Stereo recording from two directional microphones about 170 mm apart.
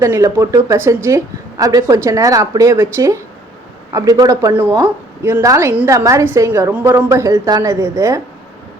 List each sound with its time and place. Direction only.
0.0 s a woman's voice: 15° right (ahead or behind)